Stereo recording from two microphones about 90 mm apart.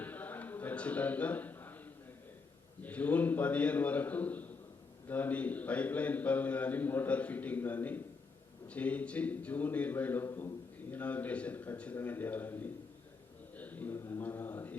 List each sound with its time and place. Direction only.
0.0 s a sound: 20° left (ahead or behind)
2.8 s a man's voice: 15° left (ahead or behind)
13.6 s mantra: 20° left (ahead or behind)